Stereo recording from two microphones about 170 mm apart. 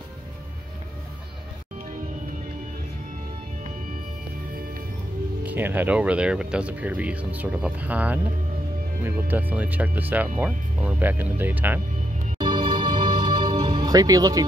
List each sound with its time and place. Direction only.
5.4 s speech: 10° right (ahead or behind)
12.4 s music: 30° right (ahead or behind)